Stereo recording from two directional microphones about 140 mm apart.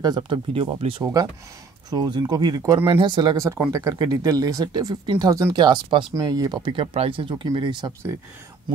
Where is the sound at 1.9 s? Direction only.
30° right (ahead or behind).